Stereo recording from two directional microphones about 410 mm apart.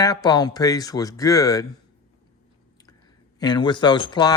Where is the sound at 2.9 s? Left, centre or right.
Centre.